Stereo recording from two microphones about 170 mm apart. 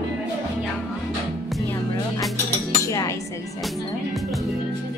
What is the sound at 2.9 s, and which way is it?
Cutlery, 20° left (ahead or behind).